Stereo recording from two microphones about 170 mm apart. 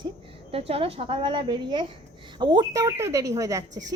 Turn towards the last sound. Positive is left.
turn(degrees=-20)  # may be behind; listen again after turning